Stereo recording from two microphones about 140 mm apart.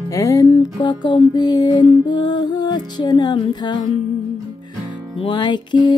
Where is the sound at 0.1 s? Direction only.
25° left (ahead or behind).